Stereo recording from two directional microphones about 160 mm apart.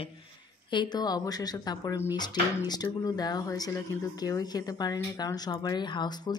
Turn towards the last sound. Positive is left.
turn(degrees=30)  # may be behind; listen again after turning